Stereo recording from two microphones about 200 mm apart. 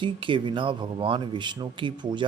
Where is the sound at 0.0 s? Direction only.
25° right (ahead or behind).